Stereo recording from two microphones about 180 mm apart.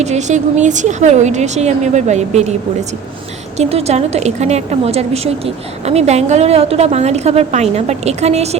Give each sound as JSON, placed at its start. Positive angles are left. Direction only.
{"t": 0.0, "sound": "a woman's voice", "side_deg": -40}
{"t": 3.6, "sound": "a woman's voice", "side_deg": -35}